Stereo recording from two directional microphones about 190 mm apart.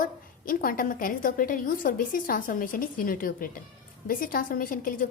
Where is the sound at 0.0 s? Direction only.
50° left (ahead or behind).